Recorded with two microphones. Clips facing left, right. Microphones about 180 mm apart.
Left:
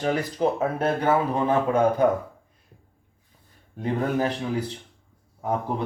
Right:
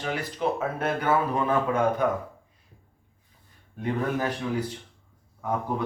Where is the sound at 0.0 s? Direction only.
40° left (ahead or behind).